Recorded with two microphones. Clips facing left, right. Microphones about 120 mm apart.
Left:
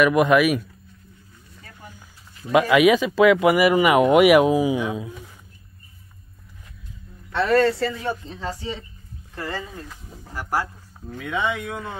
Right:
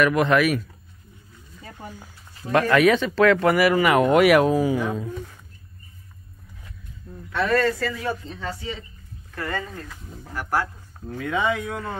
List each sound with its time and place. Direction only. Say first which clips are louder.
0.0 s speech: left 2 dB; 15° left (ahead or behind)
1.6 s a sound: right 6 dB; 25° right (ahead or behind)
2.5 s speech: left 2 dB; 10° left (ahead or behind)
7.3 s speech: left 3 dB; 30° left (ahead or behind)
9.5 s speech: right 2 dB; 5° left (ahead or behind)